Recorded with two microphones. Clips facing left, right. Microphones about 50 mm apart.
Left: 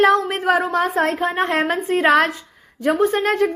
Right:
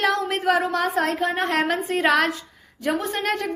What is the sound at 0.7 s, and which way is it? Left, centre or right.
A woman's voice, left.